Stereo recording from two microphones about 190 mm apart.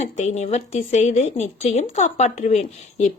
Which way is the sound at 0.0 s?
35° left (ahead or behind).